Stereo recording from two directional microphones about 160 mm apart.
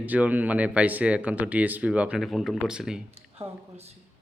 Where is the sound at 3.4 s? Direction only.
40° right (ahead or behind).